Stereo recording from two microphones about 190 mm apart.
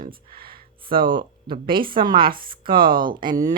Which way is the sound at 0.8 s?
25° right (ahead or behind).